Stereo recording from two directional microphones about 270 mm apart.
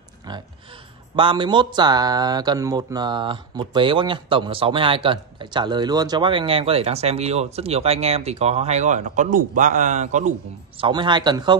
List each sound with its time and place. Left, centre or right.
0.3 s a man's voice: centre